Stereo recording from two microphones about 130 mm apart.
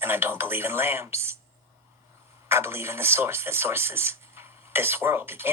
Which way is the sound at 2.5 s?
20° right (ahead or behind).